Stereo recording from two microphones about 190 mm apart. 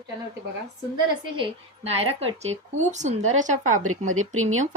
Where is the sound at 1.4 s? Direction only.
30° right (ahead or behind).